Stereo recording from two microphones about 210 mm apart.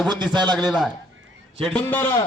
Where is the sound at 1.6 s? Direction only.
5° left (ahead or behind).